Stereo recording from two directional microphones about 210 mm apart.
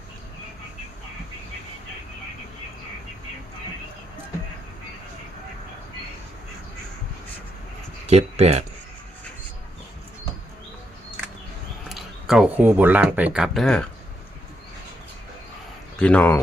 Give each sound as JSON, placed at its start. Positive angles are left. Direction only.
{"t": 8.0, "sound": "speech", "side_deg": -30}
{"t": 11.9, "sound": "speech", "side_deg": 0}
{"t": 16.0, "sound": "speech", "side_deg": 5}